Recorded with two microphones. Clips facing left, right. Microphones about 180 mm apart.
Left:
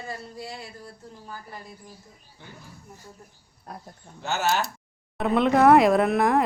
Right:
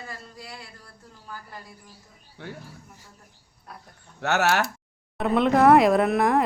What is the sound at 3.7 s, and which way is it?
Speech, 45° left (ahead or behind).